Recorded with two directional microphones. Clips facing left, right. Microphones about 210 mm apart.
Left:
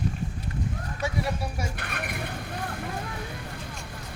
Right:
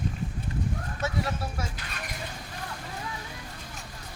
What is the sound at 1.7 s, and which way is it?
Vehicle, 60° left (ahead or behind).